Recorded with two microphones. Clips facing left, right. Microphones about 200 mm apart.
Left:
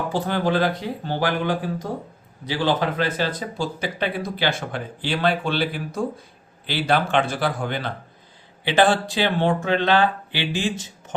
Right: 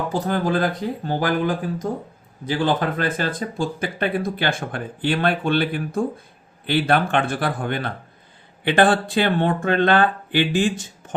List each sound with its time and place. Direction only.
0.1 s speech: 45° right (ahead or behind)
2.5 s speech: 50° right (ahead or behind)